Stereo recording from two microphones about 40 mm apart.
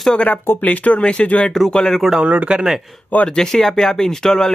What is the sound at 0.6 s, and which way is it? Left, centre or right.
Speech, left.